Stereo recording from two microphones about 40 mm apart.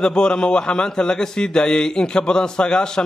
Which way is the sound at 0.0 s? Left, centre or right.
Left.